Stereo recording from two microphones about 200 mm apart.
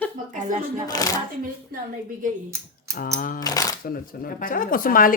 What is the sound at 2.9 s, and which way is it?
Speech, 45° left (ahead or behind).